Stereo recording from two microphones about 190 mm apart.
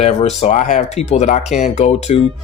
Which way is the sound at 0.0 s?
35° left (ahead or behind).